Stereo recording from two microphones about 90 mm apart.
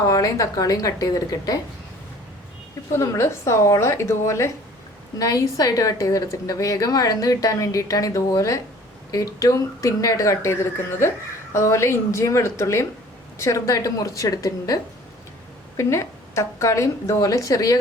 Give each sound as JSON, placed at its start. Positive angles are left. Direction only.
{"t": 0.0, "sound": "a woman's voice", "side_deg": 40}
{"t": 2.9, "sound": "a woman's voice", "side_deg": 35}
{"t": 15.8, "sound": "a woman's voice", "side_deg": 30}